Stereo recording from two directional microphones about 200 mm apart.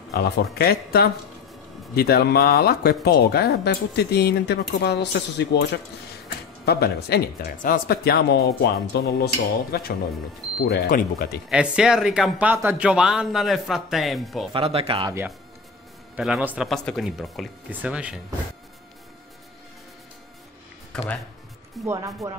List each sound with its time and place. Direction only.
0.1 s speech: 50° left (ahead or behind)
11.4 s speech: 5° right (ahead or behind)
14.5 s speech: 30° right (ahead or behind)
16.2 s speech: 5° right (ahead or behind)
20.9 s speech: 5° left (ahead or behind)
21.8 s speech: 15° right (ahead or behind)